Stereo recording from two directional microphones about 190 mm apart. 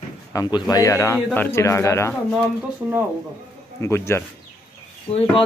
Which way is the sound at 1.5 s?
15° left (ahead or behind).